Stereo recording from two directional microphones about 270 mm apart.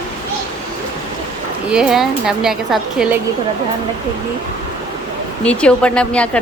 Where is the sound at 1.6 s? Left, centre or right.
Centre.